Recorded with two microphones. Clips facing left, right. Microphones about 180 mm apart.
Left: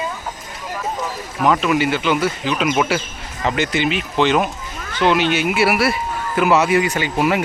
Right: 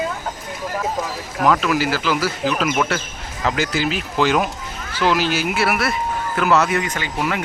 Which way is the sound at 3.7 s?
Centre (ahead or behind).